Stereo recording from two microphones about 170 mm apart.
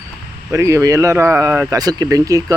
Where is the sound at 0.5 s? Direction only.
15° right (ahead or behind).